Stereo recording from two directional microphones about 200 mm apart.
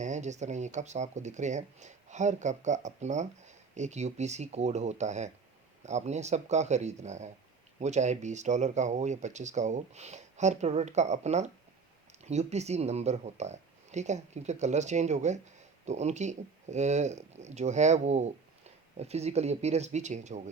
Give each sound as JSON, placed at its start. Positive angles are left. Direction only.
{"t": 0.0, "sound": "speech", "side_deg": -35}